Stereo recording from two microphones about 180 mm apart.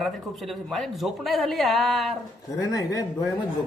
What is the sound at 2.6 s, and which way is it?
Speech, 20° left (ahead or behind).